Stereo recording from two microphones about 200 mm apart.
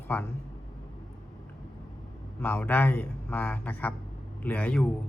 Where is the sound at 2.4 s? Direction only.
10° left (ahead or behind).